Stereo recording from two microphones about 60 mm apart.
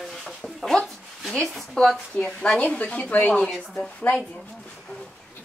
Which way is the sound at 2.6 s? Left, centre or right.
Centre.